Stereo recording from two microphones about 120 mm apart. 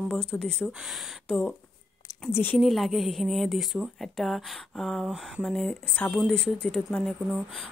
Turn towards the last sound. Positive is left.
turn(degrees=0)  # may be behind; listen again after turning